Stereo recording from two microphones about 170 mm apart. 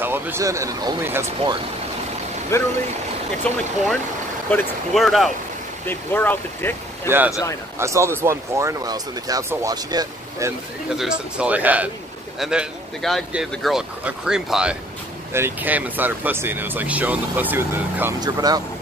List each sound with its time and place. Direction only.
0.0 s speech: 15° right (ahead or behind)
2.5 s speech: 15° left (ahead or behind)
3.4 s speech: 5° left (ahead or behind)
5.9 s speech: 10° left (ahead or behind)
7.1 s speech: 10° right (ahead or behind)
11.0 s speech: 5° right (ahead or behind)
18.2 s speech: 20° right (ahead or behind)